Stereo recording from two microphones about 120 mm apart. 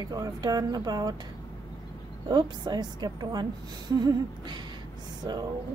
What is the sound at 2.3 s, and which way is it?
A woman's voice, 35° right (ahead or behind).